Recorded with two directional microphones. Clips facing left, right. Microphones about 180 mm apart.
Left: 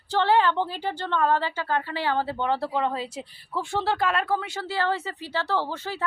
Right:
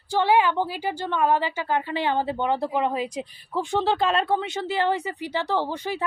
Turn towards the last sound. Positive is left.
turn(degrees=-15)  # may be behind; listen again after turning